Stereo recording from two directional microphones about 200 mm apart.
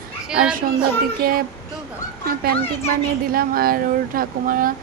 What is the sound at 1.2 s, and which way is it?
Speech, 45° right (ahead or behind).